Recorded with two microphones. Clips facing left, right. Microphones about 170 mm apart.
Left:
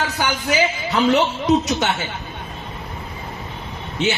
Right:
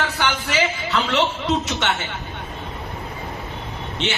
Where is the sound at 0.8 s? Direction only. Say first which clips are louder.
Left 4 dB; 40° left (ahead or behind).